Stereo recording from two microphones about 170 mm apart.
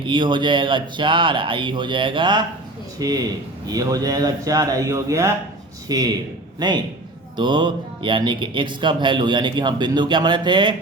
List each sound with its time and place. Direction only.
0.0 s speech: 30° right (ahead or behind)